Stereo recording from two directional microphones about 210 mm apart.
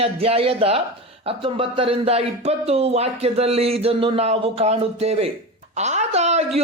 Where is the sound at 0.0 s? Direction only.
30° right (ahead or behind).